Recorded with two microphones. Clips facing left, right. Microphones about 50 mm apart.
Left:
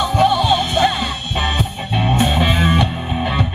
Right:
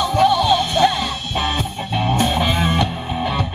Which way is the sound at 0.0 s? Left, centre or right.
Centre.